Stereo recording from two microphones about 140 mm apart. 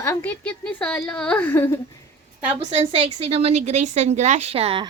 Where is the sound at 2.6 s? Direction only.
45° right (ahead or behind).